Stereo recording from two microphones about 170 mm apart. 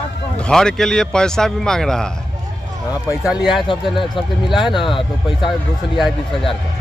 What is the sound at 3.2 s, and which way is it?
Speech, 5° right (ahead or behind).